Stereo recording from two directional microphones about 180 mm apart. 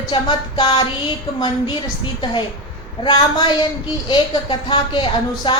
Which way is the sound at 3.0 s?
25° left (ahead or behind).